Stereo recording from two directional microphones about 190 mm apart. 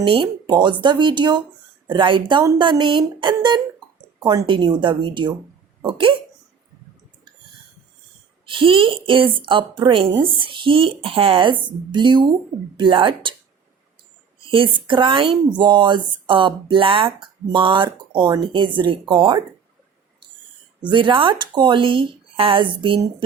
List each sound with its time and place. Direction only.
0.0 s speech: 25° right (ahead or behind)
8.4 s speech: 25° right (ahead or behind)
14.4 s speech: 25° right (ahead or behind)
20.8 s speech: 25° right (ahead or behind)